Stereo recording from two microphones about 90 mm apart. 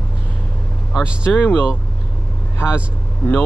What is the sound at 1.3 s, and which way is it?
Speech, 20° left (ahead or behind).